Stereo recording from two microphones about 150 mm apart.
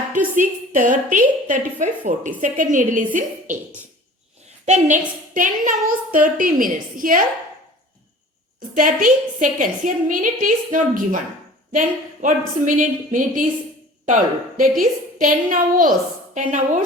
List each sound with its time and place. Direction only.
0.3 s a woman's voice: 60° right (ahead or behind)
4.6 s a woman's voice: 55° right (ahead or behind)
8.7 s a woman's voice: 65° right (ahead or behind)